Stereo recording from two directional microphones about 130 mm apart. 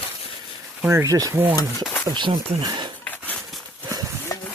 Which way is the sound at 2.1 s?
35° right (ahead or behind).